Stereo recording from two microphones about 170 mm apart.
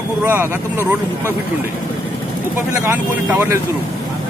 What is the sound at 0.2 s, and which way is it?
Speech, 10° right (ahead or behind).